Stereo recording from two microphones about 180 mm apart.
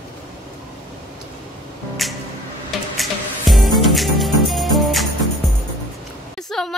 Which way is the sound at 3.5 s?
Centre (ahead or behind).